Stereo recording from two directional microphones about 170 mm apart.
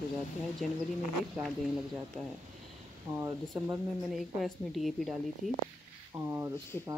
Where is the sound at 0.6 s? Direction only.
Centre (ahead or behind).